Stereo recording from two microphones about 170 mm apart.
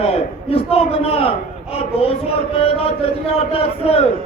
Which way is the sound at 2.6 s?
35° left (ahead or behind).